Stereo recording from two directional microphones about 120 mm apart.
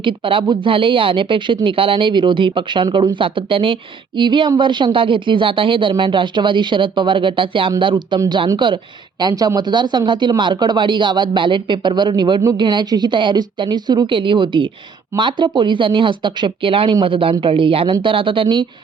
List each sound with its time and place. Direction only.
0.0 s speech: 45° right (ahead or behind)
9.2 s speech: 30° right (ahead or behind)